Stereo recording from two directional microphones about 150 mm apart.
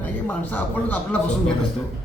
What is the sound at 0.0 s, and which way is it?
A man's voice, 10° left (ahead or behind).